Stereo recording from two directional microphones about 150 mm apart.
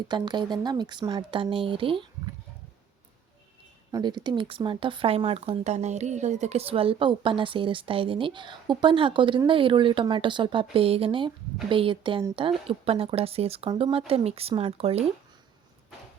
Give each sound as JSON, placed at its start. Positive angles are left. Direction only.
{"t": 0.1, "sound": "speech", "side_deg": -30}
{"t": 3.9, "sound": "speech", "side_deg": -30}